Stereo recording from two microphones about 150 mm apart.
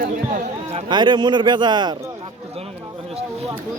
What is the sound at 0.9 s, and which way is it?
A man's voice, 30° right (ahead or behind).